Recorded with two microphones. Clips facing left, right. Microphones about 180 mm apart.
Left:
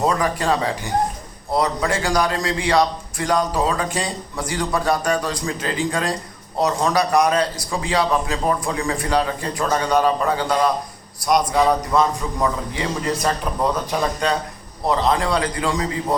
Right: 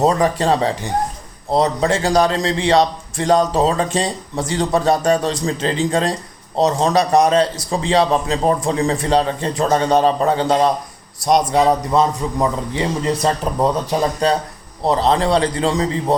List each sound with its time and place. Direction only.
0.0 s a man's voice: 30° right (ahead or behind)